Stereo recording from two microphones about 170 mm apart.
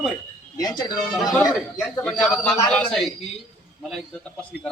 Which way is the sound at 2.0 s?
5° left (ahead or behind).